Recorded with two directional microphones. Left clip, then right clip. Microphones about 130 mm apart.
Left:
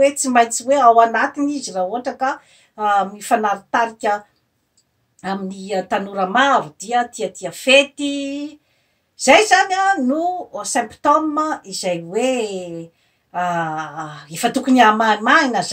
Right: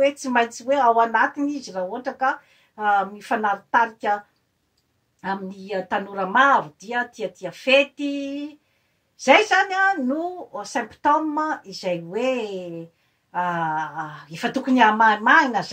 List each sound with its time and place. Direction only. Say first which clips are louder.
0.0 s speech: left 6 dB; 25° left (ahead or behind)
5.2 s speech: left 3 dB; 25° left (ahead or behind)